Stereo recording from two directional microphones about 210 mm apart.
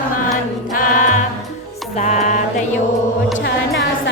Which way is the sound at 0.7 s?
40° left (ahead or behind).